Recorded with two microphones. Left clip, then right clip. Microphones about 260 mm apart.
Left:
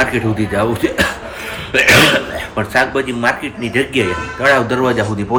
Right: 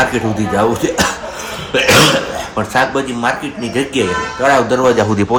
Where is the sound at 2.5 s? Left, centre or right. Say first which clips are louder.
Even; centre.